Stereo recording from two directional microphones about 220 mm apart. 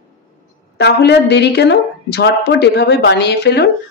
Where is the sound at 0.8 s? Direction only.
50° left (ahead or behind).